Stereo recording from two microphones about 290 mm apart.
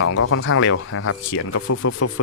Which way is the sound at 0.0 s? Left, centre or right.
Left.